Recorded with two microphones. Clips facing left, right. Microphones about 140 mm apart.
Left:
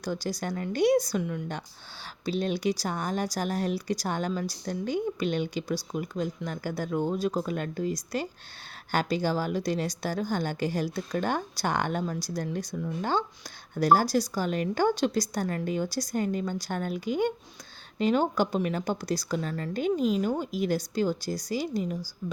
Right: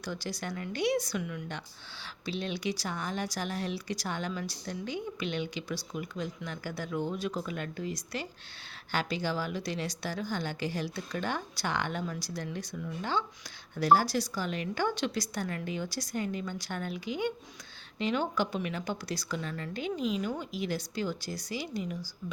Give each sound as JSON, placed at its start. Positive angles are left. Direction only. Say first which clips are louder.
{"t": 0.0, "sound": "speech", "louder": "left 5 dB", "side_deg": 40}